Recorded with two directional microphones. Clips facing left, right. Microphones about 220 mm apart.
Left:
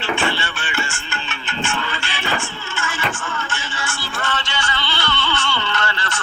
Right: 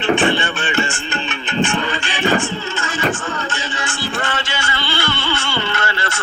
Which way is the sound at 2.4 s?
20° right (ahead or behind).